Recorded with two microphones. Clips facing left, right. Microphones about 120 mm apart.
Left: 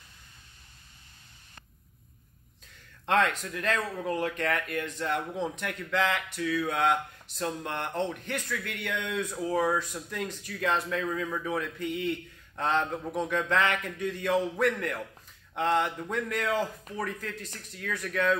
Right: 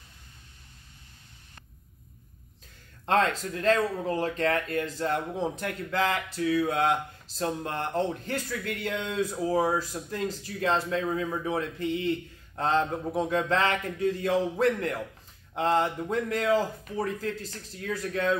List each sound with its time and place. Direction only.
3.1 s speech: 30° right (ahead or behind)